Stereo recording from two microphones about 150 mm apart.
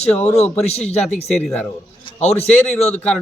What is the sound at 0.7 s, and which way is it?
Speech, 45° left (ahead or behind).